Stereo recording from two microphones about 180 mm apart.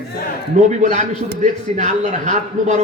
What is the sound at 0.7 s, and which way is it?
A man's voice, 40° right (ahead or behind).